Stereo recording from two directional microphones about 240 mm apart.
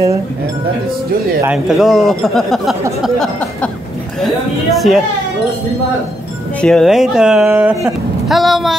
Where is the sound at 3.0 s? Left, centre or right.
Centre.